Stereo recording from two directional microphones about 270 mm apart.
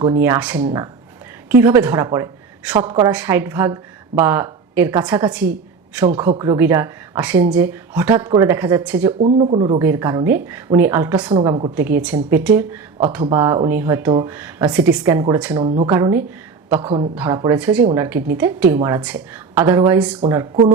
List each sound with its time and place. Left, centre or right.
0.0 s a woman's voice: centre
9.2 s speech: right; by 11.3 s centre
11.3 s speech: centre
15.5 s speech: right
15.9 s a woman's voice: centre